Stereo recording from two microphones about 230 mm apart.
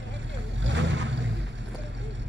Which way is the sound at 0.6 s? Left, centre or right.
Right.